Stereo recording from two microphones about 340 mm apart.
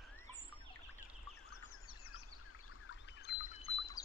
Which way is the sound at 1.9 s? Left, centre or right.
Left.